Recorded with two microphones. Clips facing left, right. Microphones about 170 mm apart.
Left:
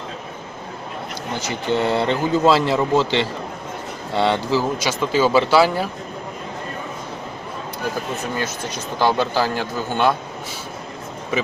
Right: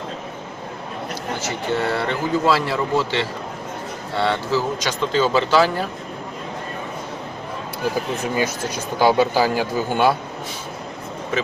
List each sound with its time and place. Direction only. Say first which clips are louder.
1.4 s speech: left 3 dB; 15° left (ahead or behind)
8.4 s speech: right 3 dB; 10° right (ahead or behind)